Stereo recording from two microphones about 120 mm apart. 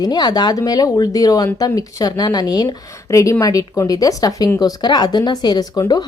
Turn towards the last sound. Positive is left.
turn(degrees=35)  # may be behind; listen again after turning